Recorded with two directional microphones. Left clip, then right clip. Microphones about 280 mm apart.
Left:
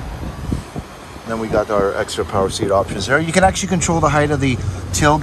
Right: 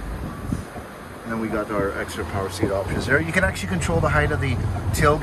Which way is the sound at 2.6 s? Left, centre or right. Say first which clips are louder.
Left 5 dB; left.